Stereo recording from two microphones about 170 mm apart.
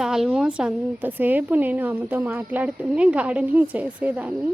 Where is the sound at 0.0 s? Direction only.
5° right (ahead or behind).